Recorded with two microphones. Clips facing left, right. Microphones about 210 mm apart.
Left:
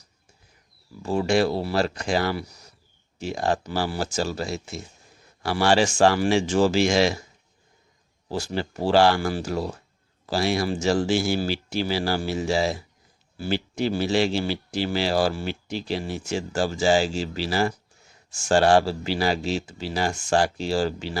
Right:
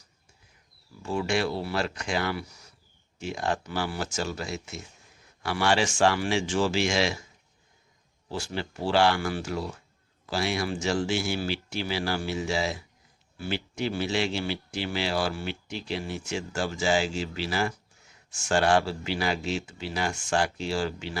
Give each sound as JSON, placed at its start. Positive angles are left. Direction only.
{"t": 1.0, "sound": "speech", "side_deg": 35}
{"t": 8.3, "sound": "speech", "side_deg": 40}